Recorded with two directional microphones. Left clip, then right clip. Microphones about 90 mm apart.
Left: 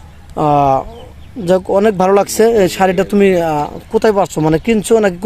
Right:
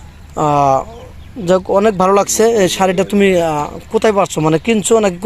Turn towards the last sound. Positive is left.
turn(degrees=55)  # may be behind; listen again after turning